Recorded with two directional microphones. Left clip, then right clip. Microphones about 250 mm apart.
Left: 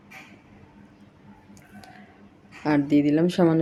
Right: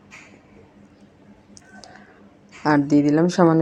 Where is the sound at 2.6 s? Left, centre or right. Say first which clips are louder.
Right 4 dB; centre.